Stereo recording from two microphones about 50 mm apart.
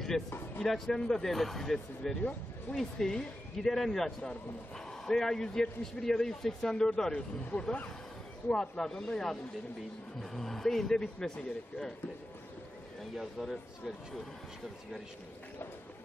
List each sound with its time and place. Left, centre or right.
0.1 s a man's voice: centre
13.1 s speech: centre